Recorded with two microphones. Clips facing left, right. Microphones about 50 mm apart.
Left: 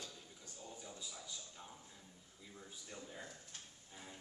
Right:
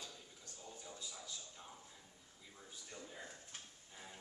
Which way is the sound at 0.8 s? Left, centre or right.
Centre.